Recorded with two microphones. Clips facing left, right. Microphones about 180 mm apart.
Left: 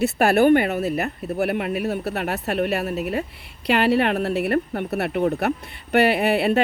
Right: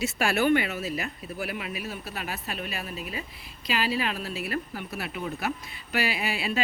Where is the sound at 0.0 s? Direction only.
60° left (ahead or behind).